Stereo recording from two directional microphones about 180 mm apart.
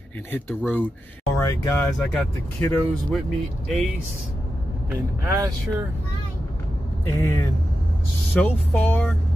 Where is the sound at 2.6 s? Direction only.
10° left (ahead or behind).